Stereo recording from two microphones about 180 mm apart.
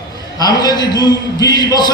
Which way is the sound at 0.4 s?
20° left (ahead or behind).